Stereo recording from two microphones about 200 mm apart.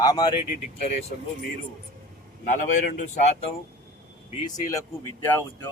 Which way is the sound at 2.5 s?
40° left (ahead or behind).